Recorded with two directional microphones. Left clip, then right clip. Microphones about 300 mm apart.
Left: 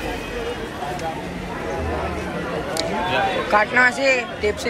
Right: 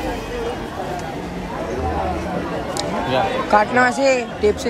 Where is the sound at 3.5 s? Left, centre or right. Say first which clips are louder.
Right 1 dB; centre.